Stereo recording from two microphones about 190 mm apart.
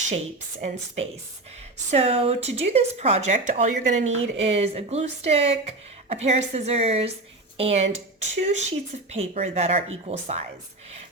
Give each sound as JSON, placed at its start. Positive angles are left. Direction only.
{"t": 1.9, "sound": "speech", "side_deg": -30}